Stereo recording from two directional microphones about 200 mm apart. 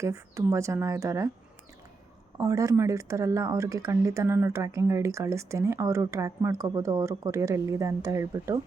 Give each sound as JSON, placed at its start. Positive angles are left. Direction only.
{"t": 0.0, "sound": "speech", "side_deg": -15}
{"t": 2.4, "sound": "speech", "side_deg": -15}